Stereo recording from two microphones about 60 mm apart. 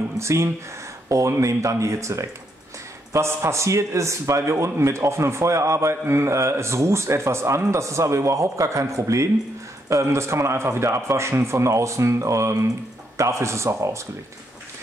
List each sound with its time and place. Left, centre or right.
0.2 s a man's voice: right
1.0 s a man's voice: right